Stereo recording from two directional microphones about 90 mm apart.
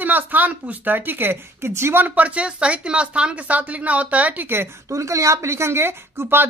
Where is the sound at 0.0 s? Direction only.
20° right (ahead or behind).